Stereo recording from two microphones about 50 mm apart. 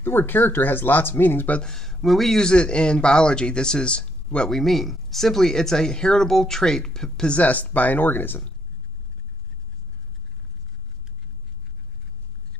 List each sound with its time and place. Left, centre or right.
0.0 s speech: left
1.6 s speech: centre
2.4 s speech: centre
4.5 s speech: centre
7.2 s speech: left